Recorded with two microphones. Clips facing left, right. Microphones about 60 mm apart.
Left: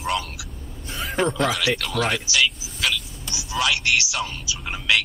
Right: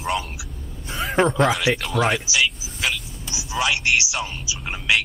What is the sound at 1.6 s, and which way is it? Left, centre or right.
Speech, centre.